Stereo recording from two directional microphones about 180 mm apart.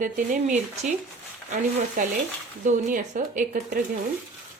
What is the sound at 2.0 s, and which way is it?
A woman's voice, 50° right (ahead or behind).